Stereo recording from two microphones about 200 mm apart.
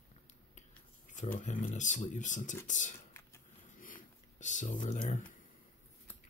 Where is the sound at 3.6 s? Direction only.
40° left (ahead or behind).